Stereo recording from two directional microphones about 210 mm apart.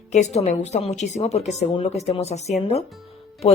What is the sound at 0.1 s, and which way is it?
A woman's voice, 30° left (ahead or behind).